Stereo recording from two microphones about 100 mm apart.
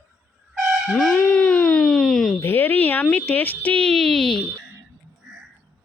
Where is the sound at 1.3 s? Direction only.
10° left (ahead or behind).